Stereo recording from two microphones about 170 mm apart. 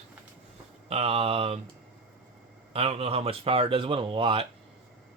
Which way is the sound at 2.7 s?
35° right (ahead or behind).